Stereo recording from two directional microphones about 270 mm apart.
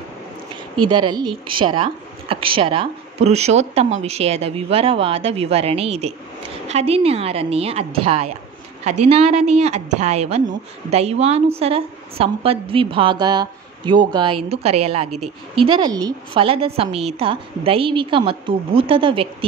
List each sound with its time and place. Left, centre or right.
0.7 s a woman's voice: centre